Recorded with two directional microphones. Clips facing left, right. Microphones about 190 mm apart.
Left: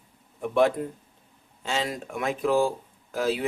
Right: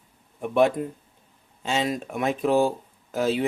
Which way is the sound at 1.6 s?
20° right (ahead or behind).